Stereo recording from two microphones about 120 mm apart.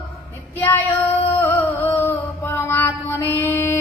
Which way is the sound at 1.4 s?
15° left (ahead or behind).